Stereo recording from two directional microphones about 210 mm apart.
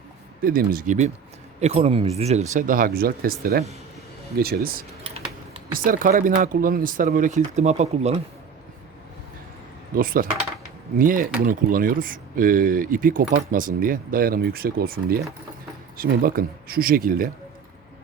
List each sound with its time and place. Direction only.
0.4 s speech: 45° right (ahead or behind)
4.4 s speech: 45° right (ahead or behind)
9.9 s speech: 45° right (ahead or behind)